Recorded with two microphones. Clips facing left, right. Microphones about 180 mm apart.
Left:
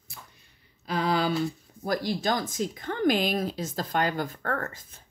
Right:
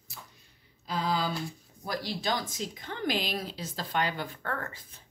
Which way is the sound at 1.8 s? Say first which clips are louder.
Left 5 dB; 50° left (ahead or behind).